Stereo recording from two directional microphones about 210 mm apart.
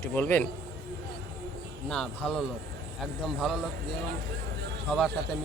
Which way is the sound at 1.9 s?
5° left (ahead or behind).